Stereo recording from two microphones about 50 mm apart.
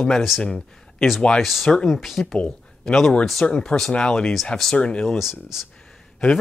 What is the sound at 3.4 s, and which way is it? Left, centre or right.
Speech, left.